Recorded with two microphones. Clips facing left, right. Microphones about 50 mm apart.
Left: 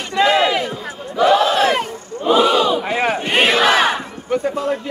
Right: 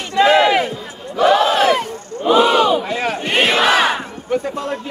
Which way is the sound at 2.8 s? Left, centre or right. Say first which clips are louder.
Left 2 dB; left.